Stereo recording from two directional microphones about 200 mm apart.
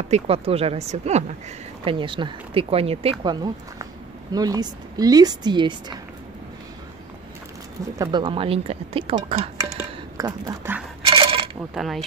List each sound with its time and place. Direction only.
0.1 s speech: 30° right (ahead or behind)
8.0 s speech: 20° right (ahead or behind)
10.1 s speech: 15° right (ahead or behind)
11.0 s coin: 25° right (ahead or behind)
11.7 s mechanisms: centre (ahead or behind)